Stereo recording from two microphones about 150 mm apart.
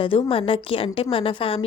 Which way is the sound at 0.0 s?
35° left (ahead or behind).